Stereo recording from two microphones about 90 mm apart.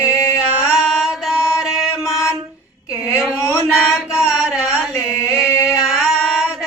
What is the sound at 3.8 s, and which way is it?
Carnatic music, 5° right (ahead or behind).